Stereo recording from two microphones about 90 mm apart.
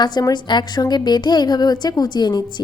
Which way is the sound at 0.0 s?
50° left (ahead or behind).